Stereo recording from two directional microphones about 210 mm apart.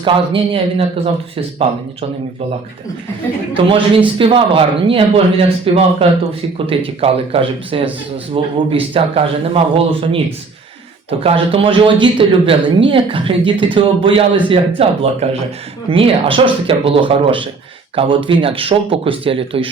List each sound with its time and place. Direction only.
0.0 s speech: 25° right (ahead or behind)
3.5 s speech: 25° right (ahead or behind)
11.2 s speech: 25° right (ahead or behind)